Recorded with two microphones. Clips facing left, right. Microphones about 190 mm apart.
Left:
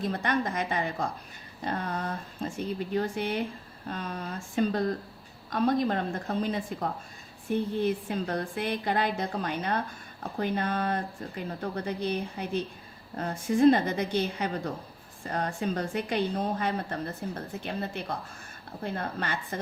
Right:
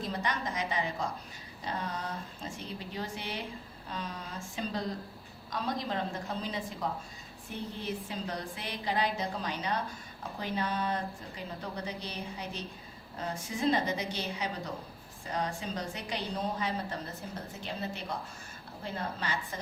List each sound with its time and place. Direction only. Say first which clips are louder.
0.0 s a woman's voice: left 6 dB; 55° left (ahead or behind)